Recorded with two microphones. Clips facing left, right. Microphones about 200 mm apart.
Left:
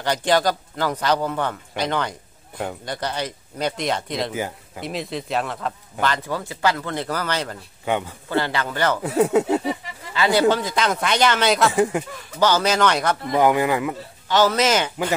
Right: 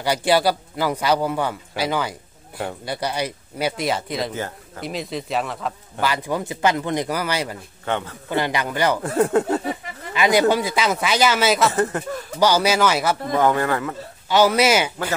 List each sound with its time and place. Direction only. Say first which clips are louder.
0.0 s speech: right 1 dB; 10° right (ahead or behind)
4.3 s speech: left 1 dB; 10° left (ahead or behind); by 7.5 s 10° right (ahead or behind)
7.8 s a man's voice: left 2 dB; 10° left (ahead or behind)
8.3 s speech: right 1 dB; 15° right (ahead or behind)
9.0 s speech: left 3 dB; 5° left (ahead or behind)
10.1 s speech: right 1 dB; 15° right (ahead or behind)
11.7 s speech: left 2 dB; 10° left (ahead or behind)
12.4 s speech: right 1 dB; 10° right (ahead or behind)
13.3 s speech: left 2 dB; 15° left (ahead or behind)
14.3 s speech: right 2 dB; 10° right (ahead or behind)